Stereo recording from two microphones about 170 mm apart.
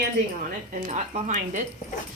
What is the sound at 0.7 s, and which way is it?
Speech, 45° right (ahead or behind).